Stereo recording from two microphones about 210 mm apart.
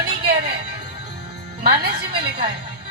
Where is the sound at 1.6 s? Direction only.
45° right (ahead or behind).